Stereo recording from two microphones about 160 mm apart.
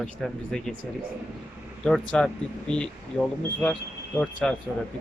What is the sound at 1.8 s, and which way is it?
Speech, 5° left (ahead or behind).